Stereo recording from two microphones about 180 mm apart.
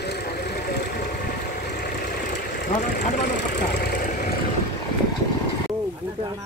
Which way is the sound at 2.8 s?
45° left (ahead or behind).